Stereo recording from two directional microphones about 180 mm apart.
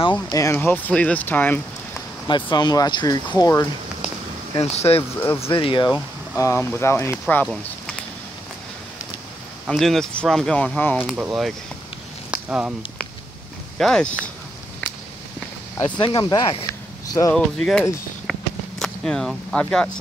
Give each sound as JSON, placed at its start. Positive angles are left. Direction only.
{"t": 0.1, "sound": "speech", "side_deg": 15}
{"t": 2.2, "sound": "speech", "side_deg": 25}
{"t": 4.6, "sound": "speech", "side_deg": 35}
{"t": 9.7, "sound": "speech", "side_deg": 0}
{"t": 11.0, "sound": "speech", "side_deg": -10}
{"t": 12.3, "sound": "a sound", "side_deg": -5}
{"t": 13.7, "sound": "speech", "side_deg": 5}
{"t": 16.0, "sound": "speech", "side_deg": 25}
{"t": 17.3, "sound": "speech", "side_deg": 0}
{"t": 18.3, "sound": "walk", "side_deg": 5}
{"t": 18.8, "sound": "speech", "side_deg": 5}